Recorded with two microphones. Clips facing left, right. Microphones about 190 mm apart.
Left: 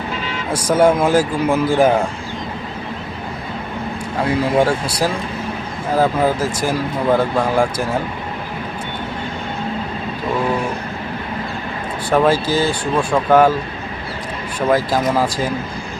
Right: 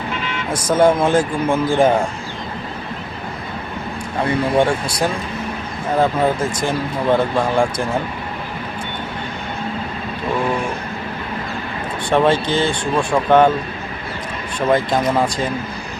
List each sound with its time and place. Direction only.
0.1 s vehicle: 35° left (ahead or behind)
0.5 s speech: 10° left (ahead or behind)
4.3 s speech: 5° left (ahead or behind)
12.1 s speech: 5° left (ahead or behind)
14.7 s speech: 5° left (ahead or behind)